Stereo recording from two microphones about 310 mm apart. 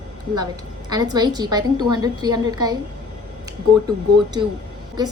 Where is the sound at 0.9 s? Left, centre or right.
Centre.